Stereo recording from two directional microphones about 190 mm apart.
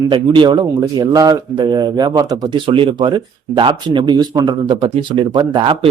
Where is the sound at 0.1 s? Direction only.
25° right (ahead or behind).